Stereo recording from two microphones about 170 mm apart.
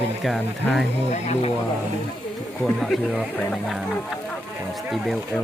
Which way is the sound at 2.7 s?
Centre (ahead or behind).